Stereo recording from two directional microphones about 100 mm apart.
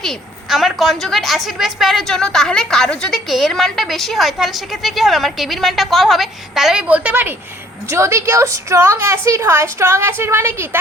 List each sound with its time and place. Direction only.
0.0 s a woman's voice: centre (ahead or behind); by 10.8 s 25° right (ahead or behind)